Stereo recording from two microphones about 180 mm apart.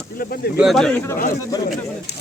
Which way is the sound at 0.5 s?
Centre (ahead or behind).